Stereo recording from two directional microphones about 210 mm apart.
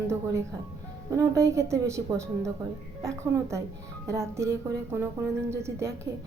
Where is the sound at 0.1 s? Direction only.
15° right (ahead or behind).